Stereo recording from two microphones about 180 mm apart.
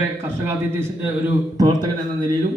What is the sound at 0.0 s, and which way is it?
A man's voice, 15° right (ahead or behind).